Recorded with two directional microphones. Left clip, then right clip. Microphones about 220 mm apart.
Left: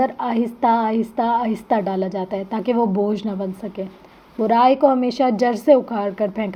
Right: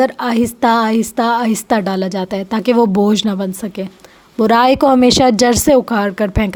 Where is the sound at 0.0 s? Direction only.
55° right (ahead or behind).